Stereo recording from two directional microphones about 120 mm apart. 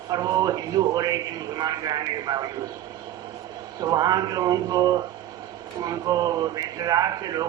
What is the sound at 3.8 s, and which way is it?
A man's voice, 30° right (ahead or behind).